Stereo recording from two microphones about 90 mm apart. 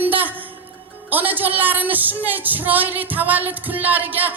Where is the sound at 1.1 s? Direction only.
20° right (ahead or behind).